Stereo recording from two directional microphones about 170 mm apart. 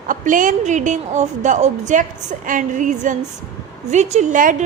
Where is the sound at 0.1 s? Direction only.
50° right (ahead or behind).